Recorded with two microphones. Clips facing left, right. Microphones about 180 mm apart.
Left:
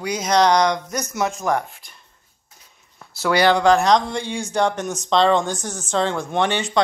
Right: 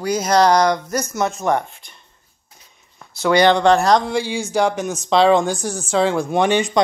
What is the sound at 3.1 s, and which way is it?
Speech, 5° left (ahead or behind).